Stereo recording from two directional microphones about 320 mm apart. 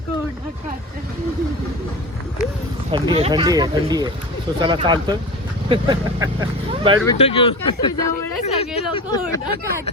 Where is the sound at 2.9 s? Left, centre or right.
Centre.